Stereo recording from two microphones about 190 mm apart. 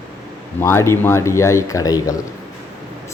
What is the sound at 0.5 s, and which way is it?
A man's voice, 15° left (ahead or behind).